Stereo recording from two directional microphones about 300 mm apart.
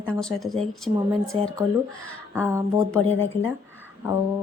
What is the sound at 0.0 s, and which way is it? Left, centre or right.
Speech, centre.